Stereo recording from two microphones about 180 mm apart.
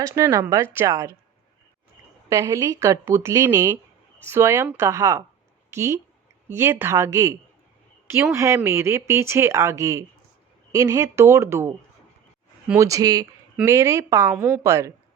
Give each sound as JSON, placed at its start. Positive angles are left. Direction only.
{"t": 0.0, "sound": "speech", "side_deg": -15}
{"t": 2.3, "sound": "speech", "side_deg": -15}